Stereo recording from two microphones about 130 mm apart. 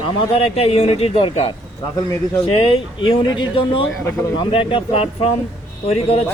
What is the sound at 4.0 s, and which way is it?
Speech, 20° left (ahead or behind).